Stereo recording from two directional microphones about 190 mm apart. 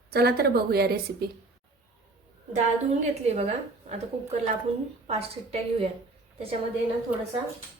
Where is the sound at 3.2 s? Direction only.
35° right (ahead or behind).